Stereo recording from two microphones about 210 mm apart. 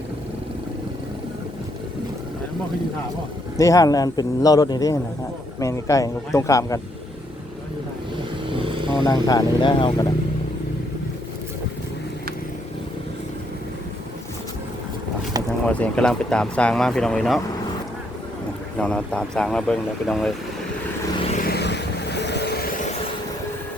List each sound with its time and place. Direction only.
3.6 s a man's voice: 15° left (ahead or behind)
8.4 s vehicle: 25° right (ahead or behind)
9.0 s speech: 15° left (ahead or behind)
15.6 s speech: 5° left (ahead or behind)
18.8 s speech: 5° left (ahead or behind)
21.4 s vehicle: 50° left (ahead or behind)